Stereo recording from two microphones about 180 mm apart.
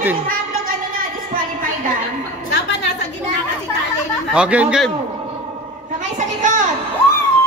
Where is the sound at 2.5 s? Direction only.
80° left.